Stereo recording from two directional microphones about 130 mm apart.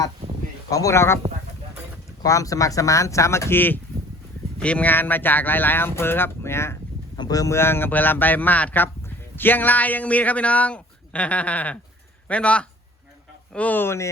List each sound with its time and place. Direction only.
0.7 s speech: 25° left (ahead or behind)
2.2 s speech: 25° left (ahead or behind)